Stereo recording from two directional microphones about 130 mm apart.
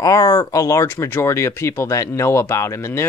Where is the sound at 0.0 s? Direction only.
25° left (ahead or behind).